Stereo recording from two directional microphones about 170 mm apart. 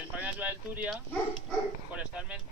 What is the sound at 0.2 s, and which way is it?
Speech, 10° right (ahead or behind).